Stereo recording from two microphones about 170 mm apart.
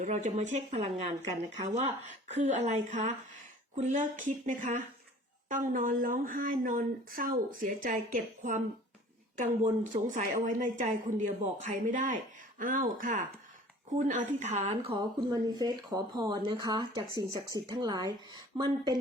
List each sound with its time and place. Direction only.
0.0 s speech: 45° right (ahead or behind)
9.4 s speech: 50° right (ahead or behind); by 18.9 s 25° right (ahead or behind)